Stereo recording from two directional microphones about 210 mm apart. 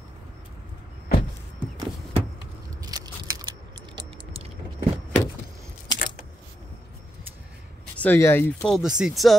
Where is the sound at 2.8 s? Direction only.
20° right (ahead or behind).